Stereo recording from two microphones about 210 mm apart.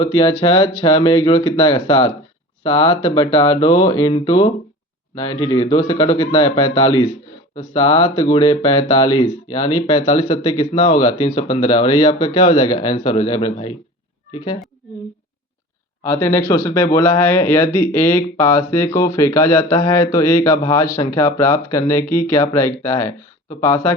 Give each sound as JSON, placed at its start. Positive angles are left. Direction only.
{"t": 0.0, "sound": "a man's voice", "side_deg": 25}
{"t": 2.9, "sound": "speech", "side_deg": 30}
{"t": 16.0, "sound": "a man's voice", "side_deg": 10}